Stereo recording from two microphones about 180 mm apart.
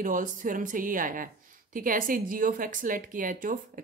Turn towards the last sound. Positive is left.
turn(degrees=-50)  # may be behind; listen again after turning